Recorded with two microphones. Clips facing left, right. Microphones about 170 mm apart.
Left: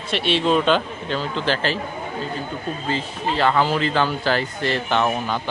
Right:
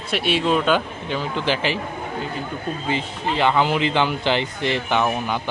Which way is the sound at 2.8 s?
15° right (ahead or behind).